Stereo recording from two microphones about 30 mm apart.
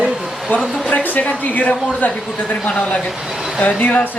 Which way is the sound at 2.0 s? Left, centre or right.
Left.